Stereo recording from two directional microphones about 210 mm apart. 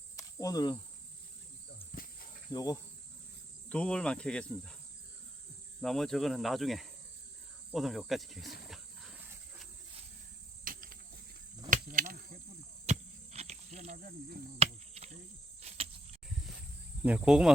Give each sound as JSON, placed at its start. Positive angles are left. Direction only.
{"t": 0.2, "sound": "cricket", "side_deg": 15}
{"t": 2.0, "sound": "cricket", "side_deg": 45}
{"t": 2.5, "sound": "insect", "side_deg": 20}
{"t": 3.7, "sound": "cricket", "side_deg": 5}
{"t": 5.8, "sound": "cricket", "side_deg": 0}
{"t": 10.6, "sound": "cricket", "side_deg": -40}
{"t": 12.8, "sound": "insect", "side_deg": -30}
{"t": 14.6, "sound": "cricket", "side_deg": -30}
{"t": 17.0, "sound": "cricket", "side_deg": -5}